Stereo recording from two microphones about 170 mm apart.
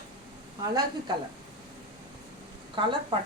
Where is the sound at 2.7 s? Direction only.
30° right (ahead or behind).